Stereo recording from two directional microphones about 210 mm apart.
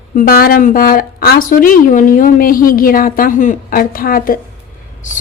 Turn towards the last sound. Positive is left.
turn(degrees=40)  # may be behind; listen again after turning